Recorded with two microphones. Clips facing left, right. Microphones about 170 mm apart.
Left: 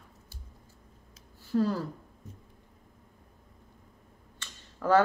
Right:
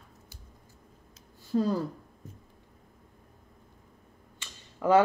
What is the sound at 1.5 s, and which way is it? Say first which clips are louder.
Speech: even; 15° right (ahead or behind).